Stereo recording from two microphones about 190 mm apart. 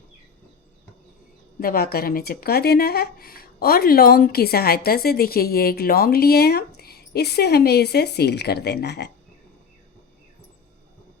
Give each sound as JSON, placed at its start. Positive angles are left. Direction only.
{"t": 1.5, "sound": "speech", "side_deg": 50}